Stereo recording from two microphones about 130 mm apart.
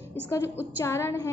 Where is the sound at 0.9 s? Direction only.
20° left (ahead or behind).